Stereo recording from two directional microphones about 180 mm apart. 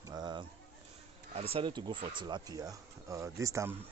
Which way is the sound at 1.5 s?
25° right (ahead or behind).